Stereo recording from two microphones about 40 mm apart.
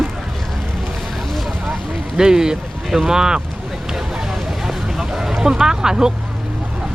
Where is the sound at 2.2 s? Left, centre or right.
Centre.